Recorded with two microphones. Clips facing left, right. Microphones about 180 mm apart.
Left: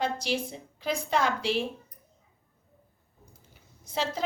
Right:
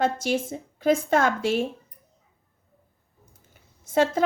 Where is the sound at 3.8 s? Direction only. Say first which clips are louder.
Right 9 dB; 50° right (ahead or behind).